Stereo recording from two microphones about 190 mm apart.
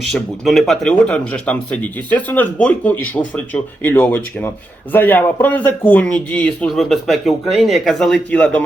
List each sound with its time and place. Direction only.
0.1 s a man's voice: centre (ahead or behind)